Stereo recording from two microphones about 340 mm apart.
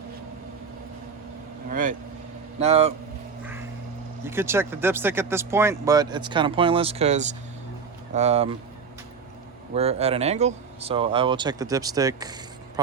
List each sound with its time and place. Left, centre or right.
1.7 s speech: right
4.3 s speech: centre
9.7 s speech: centre